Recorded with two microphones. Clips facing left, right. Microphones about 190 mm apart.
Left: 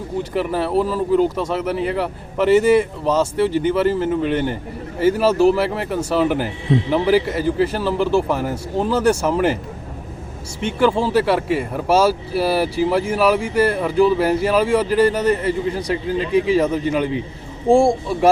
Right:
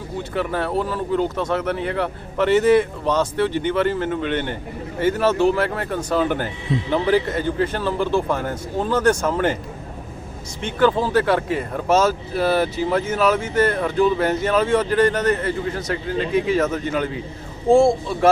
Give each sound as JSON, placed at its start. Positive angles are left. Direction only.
{"t": 0.2, "sound": "speech", "side_deg": 5}
{"t": 10.6, "sound": "speech", "side_deg": 10}
{"t": 16.3, "sound": "speech", "side_deg": 30}
{"t": 17.7, "sound": "speech", "side_deg": 15}